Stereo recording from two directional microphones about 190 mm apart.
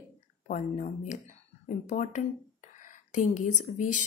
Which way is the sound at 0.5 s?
40° left (ahead or behind).